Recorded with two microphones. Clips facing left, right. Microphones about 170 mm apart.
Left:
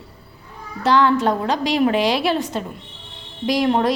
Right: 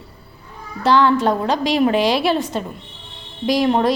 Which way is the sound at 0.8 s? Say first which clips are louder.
Right 1 dB; 30° right (ahead or behind).